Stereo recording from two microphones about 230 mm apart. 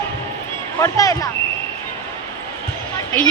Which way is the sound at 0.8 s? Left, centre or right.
Centre.